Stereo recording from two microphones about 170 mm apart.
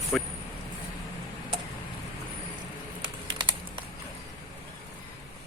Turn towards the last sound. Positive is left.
turn(degrees=-30)  # may be behind; listen again after turning